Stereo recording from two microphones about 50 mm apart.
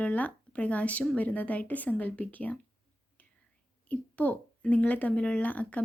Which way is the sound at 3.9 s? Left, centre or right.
Left.